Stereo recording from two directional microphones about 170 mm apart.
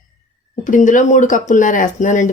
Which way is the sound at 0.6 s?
50° left (ahead or behind).